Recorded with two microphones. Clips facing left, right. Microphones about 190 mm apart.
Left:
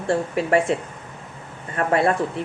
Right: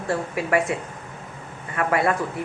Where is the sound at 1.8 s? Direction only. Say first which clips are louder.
Left 2 dB; 25° left (ahead or behind).